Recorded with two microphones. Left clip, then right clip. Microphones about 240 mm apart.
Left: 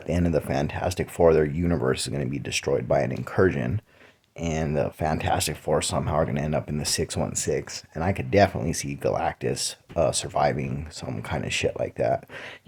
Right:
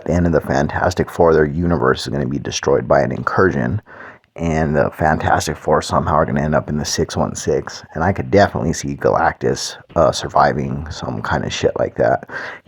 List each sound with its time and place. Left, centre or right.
0.0 s speech: right